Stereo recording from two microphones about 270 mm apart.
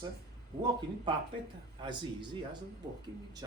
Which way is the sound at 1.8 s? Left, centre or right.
Centre.